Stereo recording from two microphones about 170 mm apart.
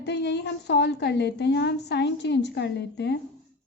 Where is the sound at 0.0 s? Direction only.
90° left.